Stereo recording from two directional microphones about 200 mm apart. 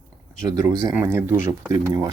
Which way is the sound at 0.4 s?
15° right (ahead or behind).